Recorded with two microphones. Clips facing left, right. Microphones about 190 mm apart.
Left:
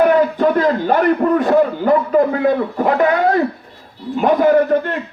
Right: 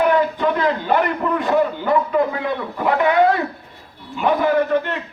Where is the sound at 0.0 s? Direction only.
45° left (ahead or behind).